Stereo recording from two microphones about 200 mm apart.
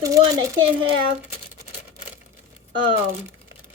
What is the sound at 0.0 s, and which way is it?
Speech, 15° right (ahead or behind).